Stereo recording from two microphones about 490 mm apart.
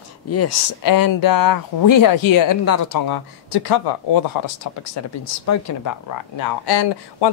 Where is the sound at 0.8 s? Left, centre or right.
Left.